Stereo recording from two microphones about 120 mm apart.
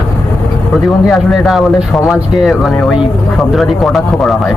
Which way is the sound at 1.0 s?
Centre (ahead or behind).